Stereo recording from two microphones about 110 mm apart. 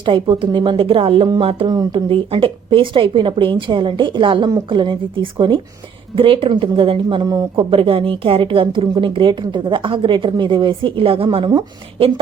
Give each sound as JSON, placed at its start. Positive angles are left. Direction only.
{"t": 0.0, "sound": "a woman's voice", "side_deg": -45}
{"t": 1.6, "sound": "speech", "side_deg": -35}
{"t": 2.0, "sound": "a woman's voice", "side_deg": -55}